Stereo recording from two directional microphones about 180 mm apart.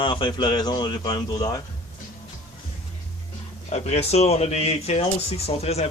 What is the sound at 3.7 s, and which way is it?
Speech, 40° left (ahead or behind).